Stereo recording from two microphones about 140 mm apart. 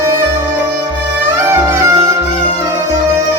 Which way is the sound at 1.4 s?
20° right (ahead or behind).